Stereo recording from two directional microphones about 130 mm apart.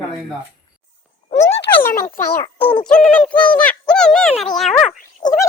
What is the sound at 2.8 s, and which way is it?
Speech, 10° left (ahead or behind).